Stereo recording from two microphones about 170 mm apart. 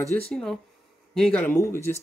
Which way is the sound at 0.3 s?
5° left (ahead or behind).